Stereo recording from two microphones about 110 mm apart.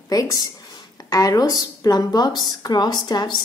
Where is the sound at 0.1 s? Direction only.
35° left (ahead or behind).